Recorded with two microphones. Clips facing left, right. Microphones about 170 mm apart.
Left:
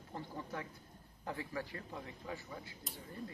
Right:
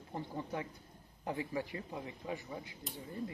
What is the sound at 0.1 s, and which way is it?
Speech, 20° right (ahead or behind).